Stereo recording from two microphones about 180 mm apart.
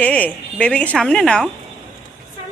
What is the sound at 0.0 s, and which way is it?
Speech, 10° left (ahead or behind).